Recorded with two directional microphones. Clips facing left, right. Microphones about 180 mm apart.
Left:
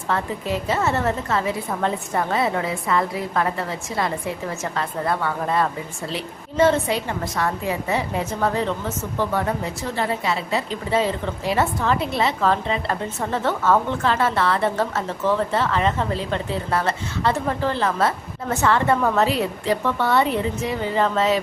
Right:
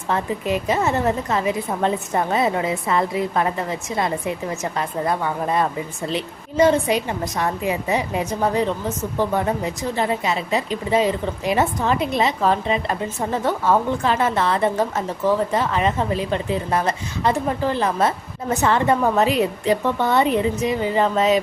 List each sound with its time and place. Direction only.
0.1 s a woman's voice: 15° right (ahead or behind)